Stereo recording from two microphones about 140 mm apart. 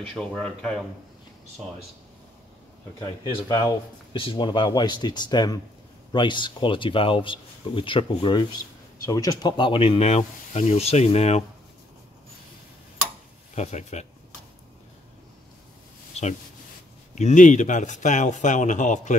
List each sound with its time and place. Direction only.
0.0 s speech: 5° left (ahead or behind)
3.3 s speech: 30° left (ahead or behind); by 11.4 s 50° left (ahead or behind)
13.6 s speech: 55° left (ahead or behind)
17.1 s a man's voice: 60° left (ahead or behind)